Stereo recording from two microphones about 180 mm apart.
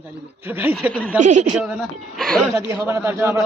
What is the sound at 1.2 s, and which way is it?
Speech, 40° right (ahead or behind).